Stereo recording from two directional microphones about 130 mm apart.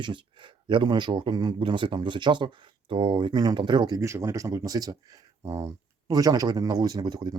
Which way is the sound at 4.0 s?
25° right (ahead or behind).